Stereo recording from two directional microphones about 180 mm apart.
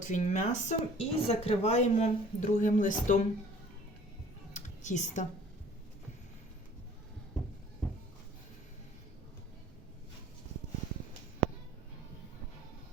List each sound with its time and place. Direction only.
0.0 s speech: 40° left (ahead or behind)
4.5 s computer keyboard: 40° left (ahead or behind)